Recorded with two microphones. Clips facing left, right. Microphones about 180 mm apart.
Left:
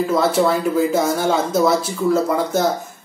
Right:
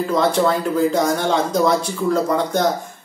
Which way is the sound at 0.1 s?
5° left (ahead or behind).